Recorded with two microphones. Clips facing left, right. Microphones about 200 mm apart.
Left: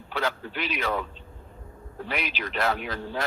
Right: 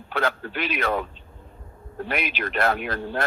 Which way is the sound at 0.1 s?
55° right (ahead or behind).